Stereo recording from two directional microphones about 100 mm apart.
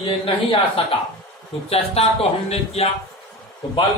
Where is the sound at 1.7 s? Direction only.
80° left.